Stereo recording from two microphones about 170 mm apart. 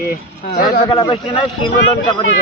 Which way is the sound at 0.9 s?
25° left (ahead or behind).